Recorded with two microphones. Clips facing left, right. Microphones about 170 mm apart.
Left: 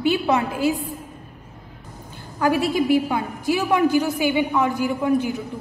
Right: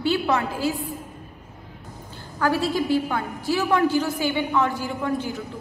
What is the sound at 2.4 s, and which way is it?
A woman's voice, 20° left (ahead or behind).